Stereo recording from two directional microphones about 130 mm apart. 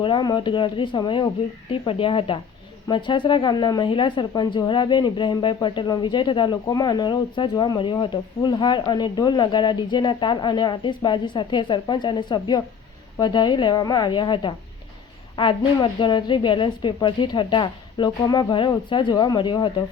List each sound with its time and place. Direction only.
0.0 s speech: 35° left (ahead or behind)